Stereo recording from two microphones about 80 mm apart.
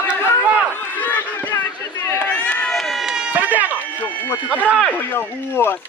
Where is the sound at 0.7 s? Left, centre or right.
Left.